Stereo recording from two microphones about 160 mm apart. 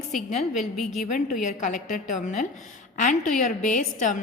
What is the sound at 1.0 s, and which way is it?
A woman's voice, 50° left (ahead or behind).